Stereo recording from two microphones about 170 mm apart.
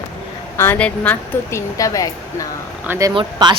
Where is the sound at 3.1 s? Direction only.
25° right (ahead or behind).